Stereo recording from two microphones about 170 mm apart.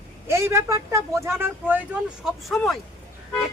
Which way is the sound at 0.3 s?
15° right (ahead or behind).